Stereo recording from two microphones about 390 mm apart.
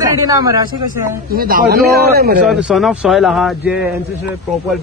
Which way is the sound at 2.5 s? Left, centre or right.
Centre.